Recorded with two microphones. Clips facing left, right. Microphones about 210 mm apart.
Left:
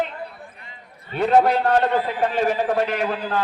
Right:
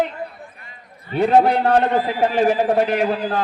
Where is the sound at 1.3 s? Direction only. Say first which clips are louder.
Right 1 dB; 30° right (ahead or behind).